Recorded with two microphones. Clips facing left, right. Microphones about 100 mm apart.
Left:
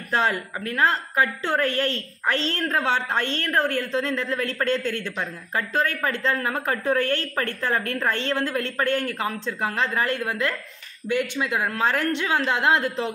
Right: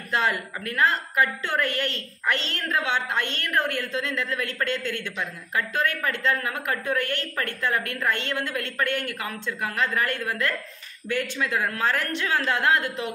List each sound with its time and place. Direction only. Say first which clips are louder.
0.1 s a woman's voice: left 2 dB; 30° left (ahead or behind)